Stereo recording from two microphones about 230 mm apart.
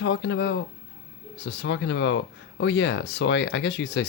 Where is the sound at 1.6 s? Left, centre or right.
Left.